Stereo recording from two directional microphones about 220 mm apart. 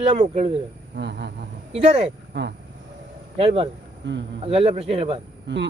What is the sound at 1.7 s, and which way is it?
Speech, 25° right (ahead or behind).